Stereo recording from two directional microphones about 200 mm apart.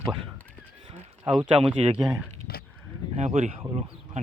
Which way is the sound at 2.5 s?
50° left (ahead or behind).